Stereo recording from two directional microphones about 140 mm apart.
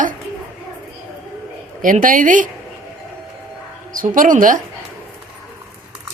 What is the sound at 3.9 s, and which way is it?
Speech, 75° right (ahead or behind).